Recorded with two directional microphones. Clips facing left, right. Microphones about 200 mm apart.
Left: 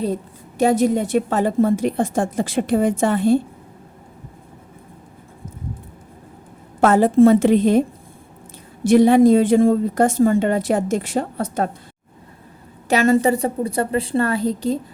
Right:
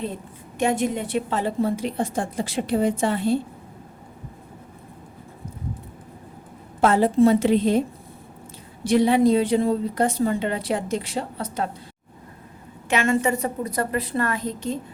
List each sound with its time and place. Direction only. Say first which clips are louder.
0.6 s a woman's voice: left 6 dB; 40° left (ahead or behind)
6.8 s a woman's voice: left 4 dB; 50° left (ahead or behind)
12.9 s a woman's voice: left 6 dB; 40° left (ahead or behind)